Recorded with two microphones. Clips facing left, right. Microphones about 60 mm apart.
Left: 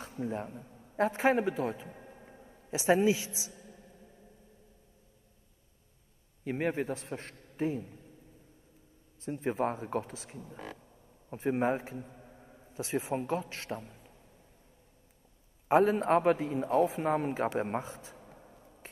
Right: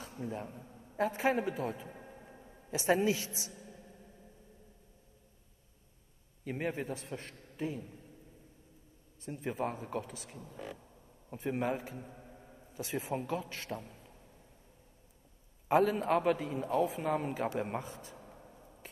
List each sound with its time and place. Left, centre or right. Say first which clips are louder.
0.9 s a man's voice: left 4 dB; left
1.9 s a sound: even; centre
2.9 s a man's voice: left 4 dB; left
3.3 s a woman's voice: even; right
6.4 s a man's voice: left 5 dB; left
9.2 s a man's voice: left 5 dB; left
12.3 s a sound: even; centre
12.7 s a man's voice: left 4 dB; left
15.7 s a man's voice: left 3 dB; left